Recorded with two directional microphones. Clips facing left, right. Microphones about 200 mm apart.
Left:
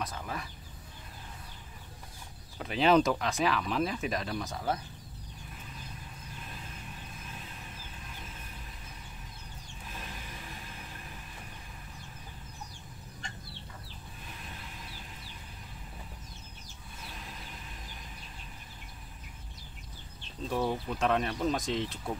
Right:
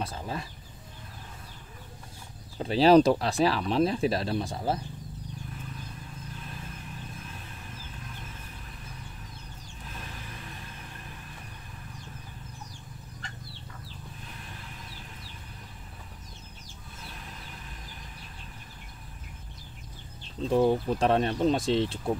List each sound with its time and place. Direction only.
0.0 s chicken: 30° right (ahead or behind)
2.6 s speech: 35° right (ahead or behind)
20.4 s chicken: 25° right (ahead or behind)
20.9 s speech: 35° right (ahead or behind)